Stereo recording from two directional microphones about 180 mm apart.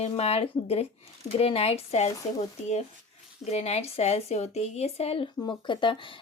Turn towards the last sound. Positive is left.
turn(degrees=25)  # may be behind; listen again after turning